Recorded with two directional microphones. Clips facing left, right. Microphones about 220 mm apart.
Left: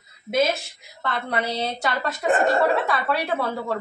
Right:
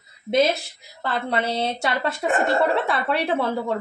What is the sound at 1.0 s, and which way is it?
Speech, 30° right (ahead or behind).